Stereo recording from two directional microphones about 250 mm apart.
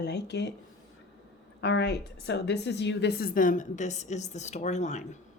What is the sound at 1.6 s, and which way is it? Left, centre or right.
A woman's voice, left.